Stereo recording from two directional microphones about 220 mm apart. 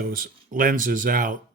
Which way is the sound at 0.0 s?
40° right (ahead or behind).